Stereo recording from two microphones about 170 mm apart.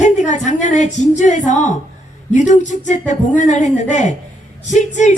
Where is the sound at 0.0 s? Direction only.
45° left (ahead or behind).